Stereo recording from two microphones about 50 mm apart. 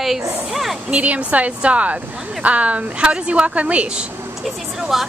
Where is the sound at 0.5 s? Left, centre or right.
Centre.